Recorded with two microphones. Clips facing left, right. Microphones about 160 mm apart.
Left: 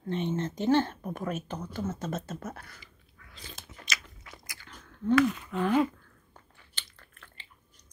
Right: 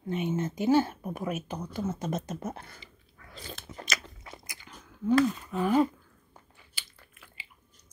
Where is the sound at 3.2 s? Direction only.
40° right (ahead or behind).